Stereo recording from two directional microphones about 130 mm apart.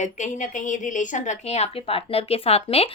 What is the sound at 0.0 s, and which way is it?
A woman's voice, 70° left (ahead or behind).